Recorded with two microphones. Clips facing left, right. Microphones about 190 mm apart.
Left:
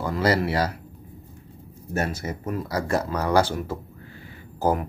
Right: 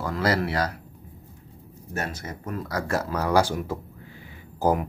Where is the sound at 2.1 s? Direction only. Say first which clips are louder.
Left 4 dB; 10° left (ahead or behind).